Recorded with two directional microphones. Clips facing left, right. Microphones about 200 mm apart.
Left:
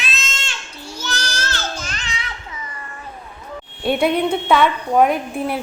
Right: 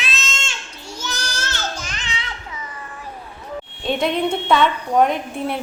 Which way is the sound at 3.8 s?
5° left (ahead or behind).